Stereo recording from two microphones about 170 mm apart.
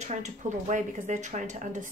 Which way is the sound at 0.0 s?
45° right (ahead or behind).